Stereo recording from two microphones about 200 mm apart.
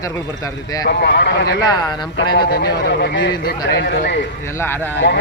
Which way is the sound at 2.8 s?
60° left (ahead or behind).